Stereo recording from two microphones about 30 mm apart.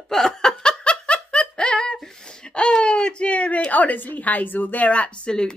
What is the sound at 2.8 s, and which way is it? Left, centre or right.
Speech, left.